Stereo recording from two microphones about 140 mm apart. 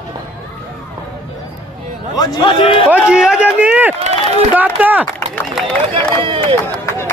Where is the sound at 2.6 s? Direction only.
40° left (ahead or behind).